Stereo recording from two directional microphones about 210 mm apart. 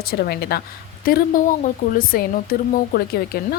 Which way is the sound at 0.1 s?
50° left (ahead or behind).